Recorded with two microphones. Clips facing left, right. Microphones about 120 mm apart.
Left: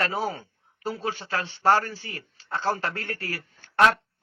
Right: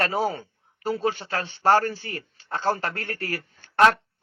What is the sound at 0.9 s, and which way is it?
A man's voice, 55° right (ahead or behind).